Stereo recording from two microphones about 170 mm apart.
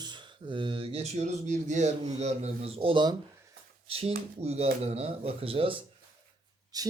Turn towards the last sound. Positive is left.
turn(degrees=-20)  # may be behind; listen again after turning